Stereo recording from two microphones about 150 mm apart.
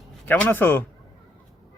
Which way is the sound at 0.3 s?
10° left (ahead or behind).